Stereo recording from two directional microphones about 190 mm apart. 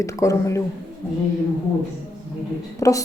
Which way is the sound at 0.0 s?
15° left (ahead or behind).